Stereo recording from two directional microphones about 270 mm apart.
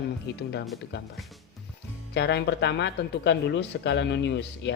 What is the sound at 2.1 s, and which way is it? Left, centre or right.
Speech, left.